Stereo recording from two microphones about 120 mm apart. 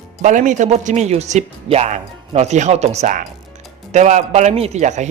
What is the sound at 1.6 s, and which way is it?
A man's voice, 60° right (ahead or behind).